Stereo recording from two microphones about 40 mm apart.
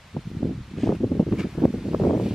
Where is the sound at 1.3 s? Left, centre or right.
Centre.